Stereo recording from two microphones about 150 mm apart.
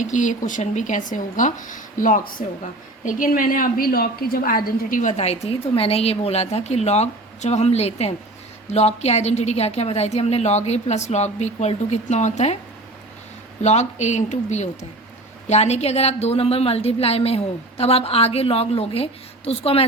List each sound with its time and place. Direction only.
0.0 s a woman's voice: 55° left (ahead or behind)
13.6 s a woman's voice: 50° left (ahead or behind)